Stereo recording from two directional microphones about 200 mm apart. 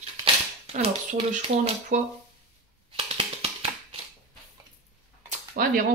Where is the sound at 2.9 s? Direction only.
30° right (ahead or behind).